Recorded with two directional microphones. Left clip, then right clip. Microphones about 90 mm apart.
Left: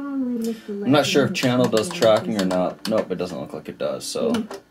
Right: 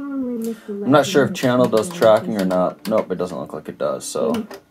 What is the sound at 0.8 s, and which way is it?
Speech, 5° right (ahead or behind).